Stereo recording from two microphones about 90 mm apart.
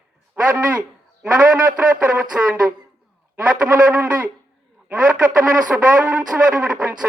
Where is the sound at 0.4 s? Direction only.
20° right (ahead or behind).